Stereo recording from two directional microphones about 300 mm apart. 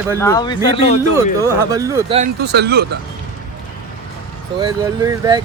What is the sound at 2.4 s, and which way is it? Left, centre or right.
Speech, right.